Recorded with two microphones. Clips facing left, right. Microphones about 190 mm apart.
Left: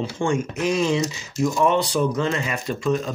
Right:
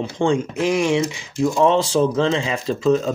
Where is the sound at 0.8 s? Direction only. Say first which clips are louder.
Right 3 dB; 80° right.